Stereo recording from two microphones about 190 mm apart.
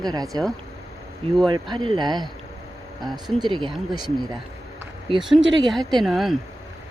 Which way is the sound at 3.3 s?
25° right (ahead or behind).